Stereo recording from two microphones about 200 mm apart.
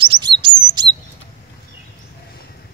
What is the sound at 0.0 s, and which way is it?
Chirp, 25° right (ahead or behind).